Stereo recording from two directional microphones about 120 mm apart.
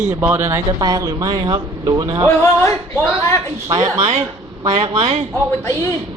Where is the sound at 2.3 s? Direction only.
20° left (ahead or behind).